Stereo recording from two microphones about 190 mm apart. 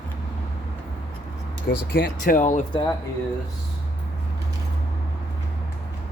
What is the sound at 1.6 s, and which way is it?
Speech, 50° left (ahead or behind).